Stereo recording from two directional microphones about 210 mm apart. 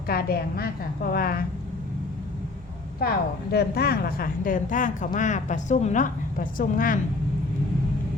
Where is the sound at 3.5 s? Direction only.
50° left (ahead or behind).